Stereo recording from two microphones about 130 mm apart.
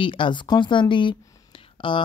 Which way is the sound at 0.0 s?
40° left (ahead or behind).